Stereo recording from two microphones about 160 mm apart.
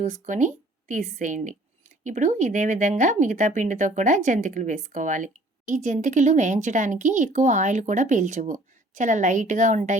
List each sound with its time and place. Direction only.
0.0 s speech: 50° right (ahead or behind)